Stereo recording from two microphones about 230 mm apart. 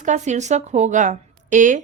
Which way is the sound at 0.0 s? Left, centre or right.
Right.